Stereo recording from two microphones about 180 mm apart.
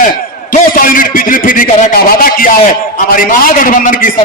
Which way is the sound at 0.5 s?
50° left (ahead or behind).